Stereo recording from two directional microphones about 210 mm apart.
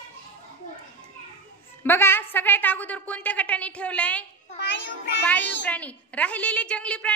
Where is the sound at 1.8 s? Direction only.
10° left (ahead or behind).